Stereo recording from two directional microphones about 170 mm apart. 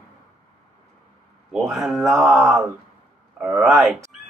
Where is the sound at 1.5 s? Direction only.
Centre (ahead or behind).